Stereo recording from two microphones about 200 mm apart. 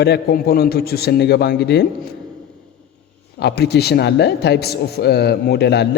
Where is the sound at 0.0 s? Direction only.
55° left (ahead or behind).